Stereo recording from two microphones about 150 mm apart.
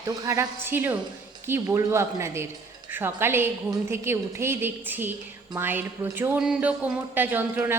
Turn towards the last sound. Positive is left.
turn(degrees=-15)  # may be behind; listen again after turning